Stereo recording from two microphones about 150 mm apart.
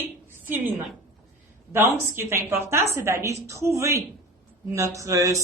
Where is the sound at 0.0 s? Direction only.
15° right (ahead or behind).